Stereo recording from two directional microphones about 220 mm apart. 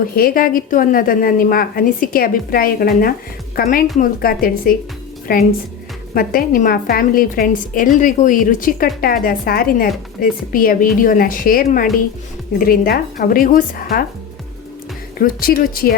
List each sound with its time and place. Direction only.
0.2 s a woman's voice: 40° left (ahead or behind)
15.2 s a woman's voice: 40° left (ahead or behind)